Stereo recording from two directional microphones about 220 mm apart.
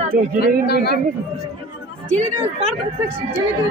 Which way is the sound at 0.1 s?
45° right (ahead or behind).